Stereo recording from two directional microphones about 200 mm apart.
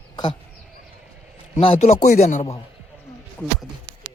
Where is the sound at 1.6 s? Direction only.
30° left (ahead or behind).